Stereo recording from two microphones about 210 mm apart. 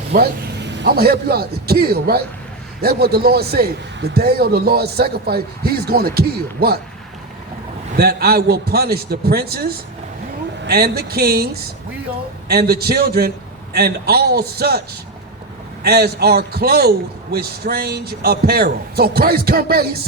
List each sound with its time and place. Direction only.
0.1 s a man's voice: 50° right (ahead or behind)
7.9 s speech: 50° right (ahead or behind)